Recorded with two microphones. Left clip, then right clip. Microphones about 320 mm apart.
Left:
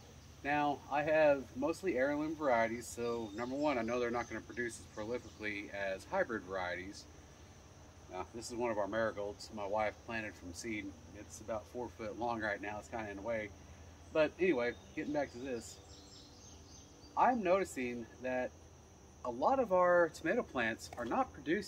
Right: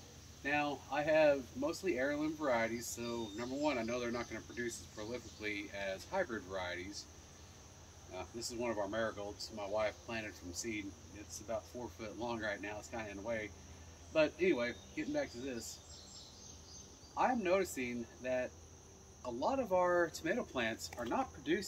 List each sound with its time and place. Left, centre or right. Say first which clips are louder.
0.4 s speech: left 2 dB; centre
8.1 s speech: left 1 dB; centre
12.0 s speech: left 3 dB; centre
17.2 s speech: left 3 dB; centre